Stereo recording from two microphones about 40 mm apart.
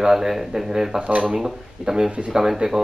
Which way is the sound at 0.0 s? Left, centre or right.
Centre.